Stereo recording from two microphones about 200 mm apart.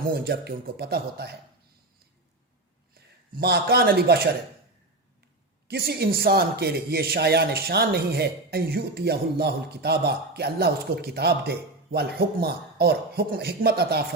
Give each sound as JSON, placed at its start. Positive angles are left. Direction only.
{"t": 0.1, "sound": "a man's voice", "side_deg": -55}
{"t": 3.3, "sound": "a man's voice", "side_deg": -50}
{"t": 5.6, "sound": "a man's voice", "side_deg": -50}